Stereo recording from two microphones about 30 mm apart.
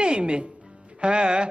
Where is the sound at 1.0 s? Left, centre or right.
Right.